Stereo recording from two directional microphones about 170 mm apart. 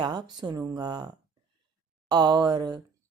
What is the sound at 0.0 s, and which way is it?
Speech, 25° right (ahead or behind).